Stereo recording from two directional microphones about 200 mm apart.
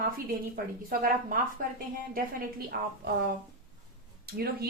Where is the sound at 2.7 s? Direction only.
55° right (ahead or behind).